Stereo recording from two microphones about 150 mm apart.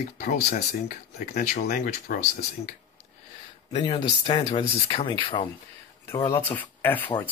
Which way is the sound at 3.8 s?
45° left (ahead or behind).